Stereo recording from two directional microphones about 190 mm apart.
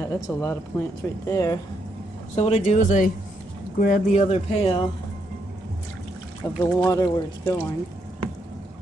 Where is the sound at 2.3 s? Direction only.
35° left (ahead or behind).